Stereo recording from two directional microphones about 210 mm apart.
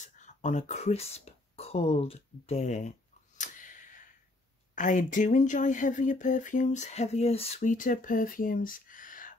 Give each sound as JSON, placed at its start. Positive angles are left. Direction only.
{"t": 0.0, "sound": "speech", "side_deg": 35}
{"t": 3.3, "sound": "a sound", "side_deg": 40}
{"t": 4.7, "sound": "speech", "side_deg": 35}